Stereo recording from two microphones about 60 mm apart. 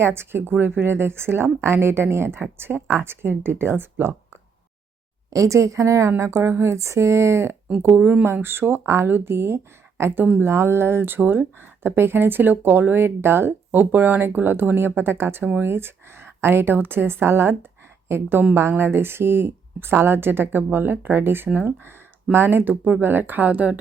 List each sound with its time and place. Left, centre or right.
0.0 s speech: right
5.3 s a woman's voice: right
7.8 s speech: right